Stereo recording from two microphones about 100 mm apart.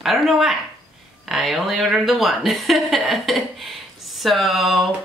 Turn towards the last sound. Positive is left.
turn(degrees=0)  # may be behind; listen again after turning